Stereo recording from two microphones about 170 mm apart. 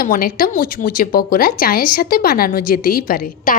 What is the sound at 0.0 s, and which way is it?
A woman's voice, 60° left (ahead or behind).